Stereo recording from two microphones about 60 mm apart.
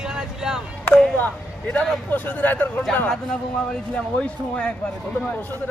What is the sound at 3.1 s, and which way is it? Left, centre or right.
Speech, centre.